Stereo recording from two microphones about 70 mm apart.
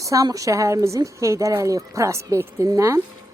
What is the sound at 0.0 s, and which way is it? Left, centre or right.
A woman's voice, right.